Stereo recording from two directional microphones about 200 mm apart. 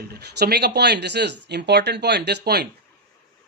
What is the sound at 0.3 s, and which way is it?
Speech, 55° right (ahead or behind).